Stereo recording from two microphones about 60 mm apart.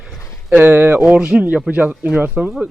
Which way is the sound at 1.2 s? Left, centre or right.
Centre.